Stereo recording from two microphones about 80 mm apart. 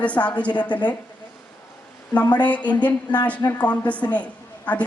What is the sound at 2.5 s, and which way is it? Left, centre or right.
A woman's voice, centre.